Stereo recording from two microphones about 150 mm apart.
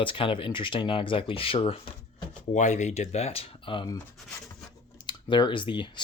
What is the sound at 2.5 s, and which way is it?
Speech, 55° left (ahead or behind).